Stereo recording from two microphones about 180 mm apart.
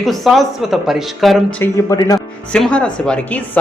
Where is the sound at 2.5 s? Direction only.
5° left (ahead or behind).